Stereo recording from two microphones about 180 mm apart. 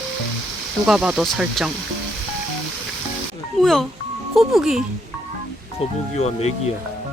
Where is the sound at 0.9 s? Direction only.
5° right (ahead or behind).